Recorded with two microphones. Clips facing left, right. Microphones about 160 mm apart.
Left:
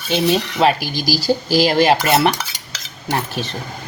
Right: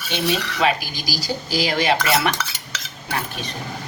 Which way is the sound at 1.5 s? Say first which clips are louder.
Left 6 dB; 40° left (ahead or behind).